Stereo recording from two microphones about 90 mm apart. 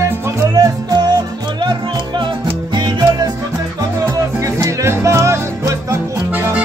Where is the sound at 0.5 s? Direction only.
45° right (ahead or behind).